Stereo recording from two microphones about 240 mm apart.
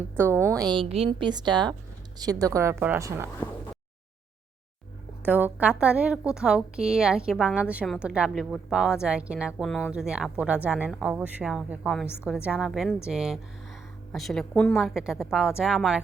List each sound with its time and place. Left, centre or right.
0.2 s a woman's voice: centre
5.2 s a woman's voice: centre